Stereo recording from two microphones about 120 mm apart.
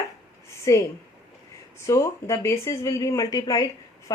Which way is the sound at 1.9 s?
25° left (ahead or behind).